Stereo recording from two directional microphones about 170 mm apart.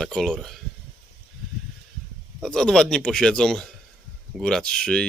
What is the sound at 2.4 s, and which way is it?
Speech, 5° left (ahead or behind).